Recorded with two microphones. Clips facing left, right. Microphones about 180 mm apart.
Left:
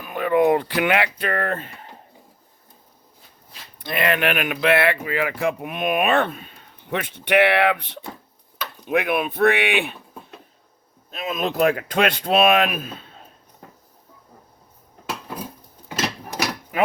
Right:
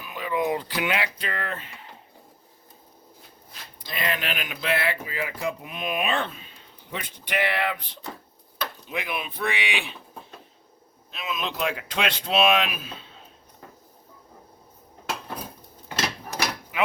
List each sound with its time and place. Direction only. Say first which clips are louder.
0.0 s speech: left 9 dB; 55° left (ahead or behind)
3.8 s speech: left 8 dB; 65° left (ahead or behind)
11.1 s speech: left 6 dB; 45° left (ahead or behind)